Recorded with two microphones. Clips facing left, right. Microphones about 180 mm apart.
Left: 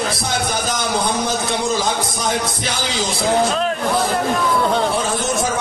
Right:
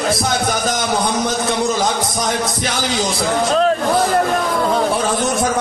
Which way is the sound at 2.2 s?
50° right (ahead or behind).